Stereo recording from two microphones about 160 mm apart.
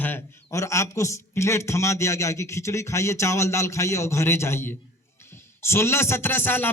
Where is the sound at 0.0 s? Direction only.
15° left (ahead or behind).